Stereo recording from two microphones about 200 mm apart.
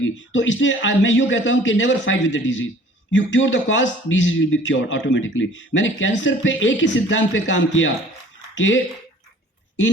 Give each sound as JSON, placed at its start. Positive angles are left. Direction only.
{"t": 0.0, "sound": "speech", "side_deg": 70}